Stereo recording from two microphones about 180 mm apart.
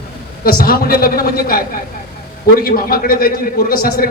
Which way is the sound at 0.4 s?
55° left (ahead or behind).